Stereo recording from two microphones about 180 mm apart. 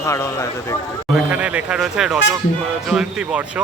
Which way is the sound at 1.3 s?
5° right (ahead or behind).